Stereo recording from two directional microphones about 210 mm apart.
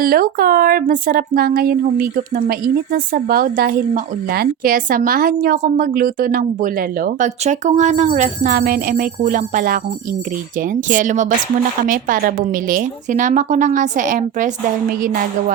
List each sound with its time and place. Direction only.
0.0 s speech: 45° right (ahead or behind)
10.8 s a woman's voice: 35° right (ahead or behind)